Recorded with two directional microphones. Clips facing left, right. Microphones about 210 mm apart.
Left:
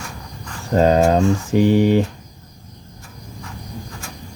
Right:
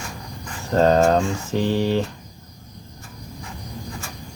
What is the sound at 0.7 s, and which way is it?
Speech, 10° left (ahead or behind).